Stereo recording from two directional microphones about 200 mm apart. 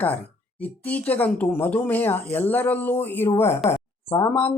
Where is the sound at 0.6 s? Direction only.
10° left (ahead or behind).